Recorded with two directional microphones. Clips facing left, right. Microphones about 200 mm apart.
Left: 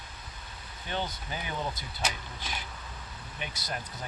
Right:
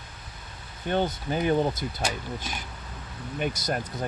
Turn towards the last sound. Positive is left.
turn(degrees=-45)  # may be behind; listen again after turning